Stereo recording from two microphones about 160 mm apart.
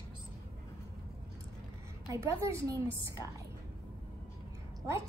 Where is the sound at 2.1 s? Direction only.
20° right (ahead or behind).